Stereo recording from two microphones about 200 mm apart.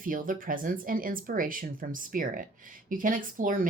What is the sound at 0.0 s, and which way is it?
Speech, 45° right (ahead or behind).